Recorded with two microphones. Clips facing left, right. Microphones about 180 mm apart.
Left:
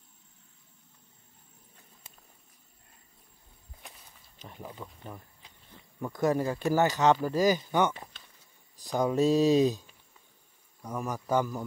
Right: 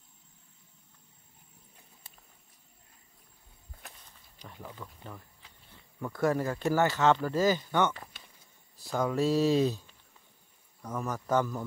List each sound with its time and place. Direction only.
3.8 s walk: centre (ahead or behind)
4.4 s speech: 20° left (ahead or behind)